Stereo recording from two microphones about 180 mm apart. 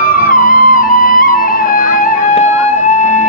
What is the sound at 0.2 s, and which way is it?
Music, 50° left (ahead or behind).